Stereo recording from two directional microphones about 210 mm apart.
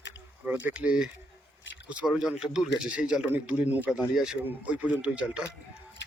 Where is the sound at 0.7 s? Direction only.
5° right (ahead or behind).